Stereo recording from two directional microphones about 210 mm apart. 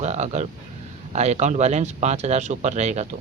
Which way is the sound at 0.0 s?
35° right (ahead or behind).